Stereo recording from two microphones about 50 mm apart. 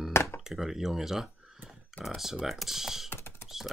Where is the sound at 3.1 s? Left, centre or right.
Left.